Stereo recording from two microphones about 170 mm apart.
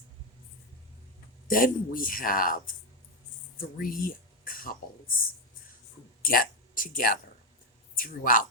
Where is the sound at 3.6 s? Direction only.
55° left (ahead or behind).